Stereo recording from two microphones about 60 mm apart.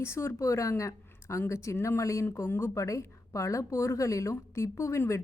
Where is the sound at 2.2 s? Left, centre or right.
Left.